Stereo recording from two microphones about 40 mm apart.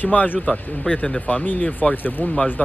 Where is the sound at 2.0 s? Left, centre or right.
Left.